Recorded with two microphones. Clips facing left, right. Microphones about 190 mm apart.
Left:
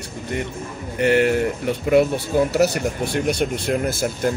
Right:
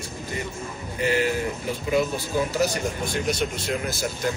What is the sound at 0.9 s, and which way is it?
Speech, 65° left (ahead or behind).